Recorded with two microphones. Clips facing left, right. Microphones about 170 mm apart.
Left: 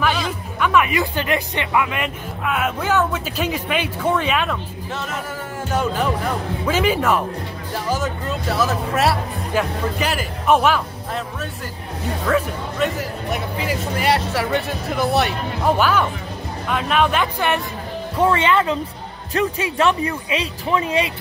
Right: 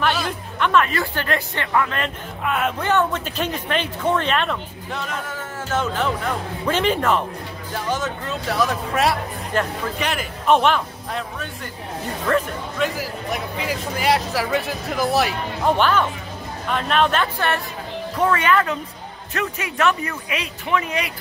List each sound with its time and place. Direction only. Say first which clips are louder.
0.0 s speech: left 1 dB; centre (ahead or behind)
18.1 s speech: left 2 dB; 25° left (ahead or behind)